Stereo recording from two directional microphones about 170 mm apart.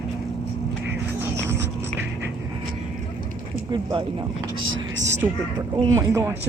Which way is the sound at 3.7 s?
30° right (ahead or behind).